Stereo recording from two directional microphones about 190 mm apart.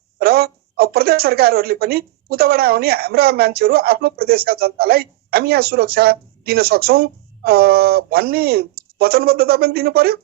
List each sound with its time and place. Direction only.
0.2 s a woman's voice: 55° right (ahead or behind)